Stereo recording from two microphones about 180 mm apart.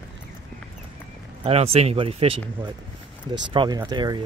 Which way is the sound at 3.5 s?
25° right (ahead or behind).